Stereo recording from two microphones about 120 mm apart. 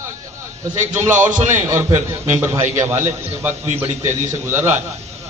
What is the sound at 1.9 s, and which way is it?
Speech, 70° right (ahead or behind).